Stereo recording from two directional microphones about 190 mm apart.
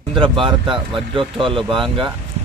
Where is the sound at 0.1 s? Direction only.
25° right (ahead or behind).